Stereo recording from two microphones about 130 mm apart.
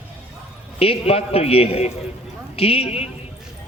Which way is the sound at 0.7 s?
50° left (ahead or behind).